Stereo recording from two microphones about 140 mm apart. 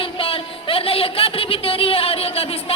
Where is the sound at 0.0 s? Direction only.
40° left (ahead or behind).